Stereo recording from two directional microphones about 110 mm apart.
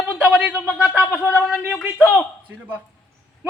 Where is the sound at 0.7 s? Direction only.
Centre (ahead or behind).